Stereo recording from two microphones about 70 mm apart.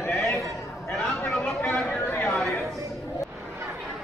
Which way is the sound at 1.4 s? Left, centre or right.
Left.